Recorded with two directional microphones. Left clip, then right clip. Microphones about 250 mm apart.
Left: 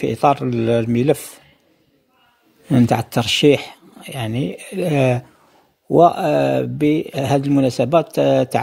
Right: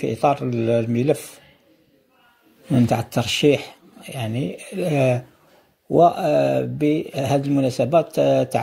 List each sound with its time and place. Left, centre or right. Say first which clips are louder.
0.0 s speech: left 3 dB; left
2.7 s speech: left 3 dB; left